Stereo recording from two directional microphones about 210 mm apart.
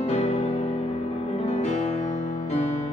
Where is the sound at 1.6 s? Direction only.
35° left (ahead or behind).